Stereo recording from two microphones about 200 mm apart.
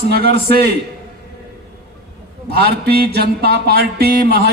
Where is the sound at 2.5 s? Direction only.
50° right (ahead or behind).